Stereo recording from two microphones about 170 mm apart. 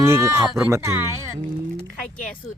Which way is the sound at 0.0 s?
15° right (ahead or behind).